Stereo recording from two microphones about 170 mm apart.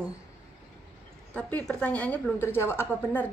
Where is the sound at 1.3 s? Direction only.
10° left (ahead or behind).